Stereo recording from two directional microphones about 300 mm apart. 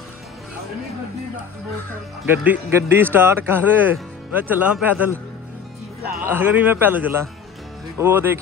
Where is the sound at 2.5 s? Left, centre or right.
Centre.